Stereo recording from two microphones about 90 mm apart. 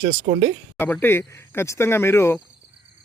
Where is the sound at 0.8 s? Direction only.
25° left (ahead or behind).